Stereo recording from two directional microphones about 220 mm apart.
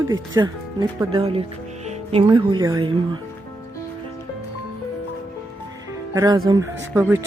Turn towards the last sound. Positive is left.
turn(degrees=-10)  # may be behind; listen again after turning